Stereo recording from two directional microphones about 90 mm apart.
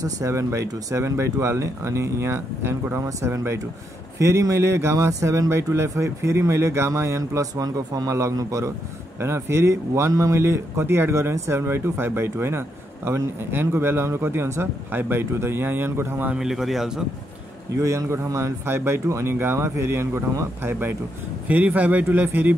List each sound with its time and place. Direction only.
0.0 s a man's voice: 35° right (ahead or behind)
16.3 s a man's voice: 5° right (ahead or behind)
17.7 s a man's voice: 35° right (ahead or behind); by 22.6 s 20° right (ahead or behind)